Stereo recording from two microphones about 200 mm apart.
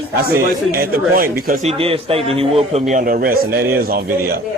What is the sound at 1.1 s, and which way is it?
A man's voice, 45° right (ahead or behind).